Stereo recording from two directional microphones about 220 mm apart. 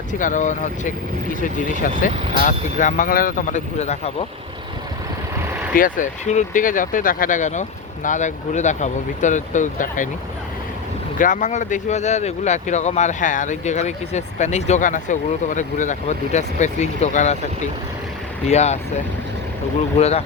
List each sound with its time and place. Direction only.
0.1 s speech: 35° left (ahead or behind)
5.7 s speech: 40° left (ahead or behind)
11.2 s speech: 35° left (ahead or behind)
18.4 s speech: 30° left (ahead or behind)
20.0 s speech: 30° left (ahead or behind)